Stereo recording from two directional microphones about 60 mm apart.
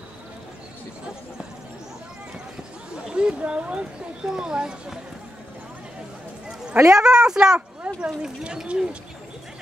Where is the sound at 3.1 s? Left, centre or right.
Centre.